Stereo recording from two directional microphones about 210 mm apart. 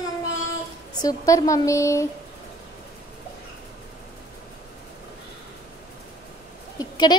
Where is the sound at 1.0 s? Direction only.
15° left (ahead or behind).